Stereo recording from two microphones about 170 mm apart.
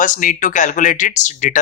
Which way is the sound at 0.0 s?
50° left (ahead or behind).